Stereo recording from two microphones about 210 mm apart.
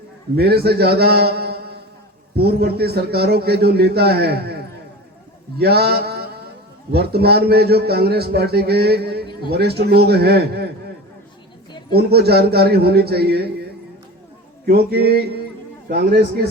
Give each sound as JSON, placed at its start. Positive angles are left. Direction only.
{"t": 0.3, "sound": "a man's voice", "side_deg": -50}
{"t": 11.9, "sound": "a man's voice", "side_deg": -50}
{"t": 14.7, "sound": "a man's voice", "side_deg": -45}